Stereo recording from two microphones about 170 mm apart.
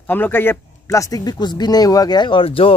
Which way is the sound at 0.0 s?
10° left (ahead or behind).